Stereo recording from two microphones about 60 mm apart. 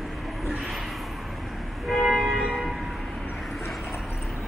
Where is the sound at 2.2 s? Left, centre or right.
Centre.